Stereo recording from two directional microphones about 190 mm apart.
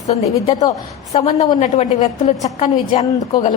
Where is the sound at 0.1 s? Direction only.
35° left (ahead or behind).